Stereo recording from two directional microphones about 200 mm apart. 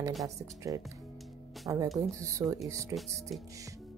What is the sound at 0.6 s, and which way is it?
Speech, 15° right (ahead or behind).